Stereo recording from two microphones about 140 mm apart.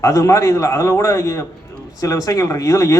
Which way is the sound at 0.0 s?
25° left (ahead or behind).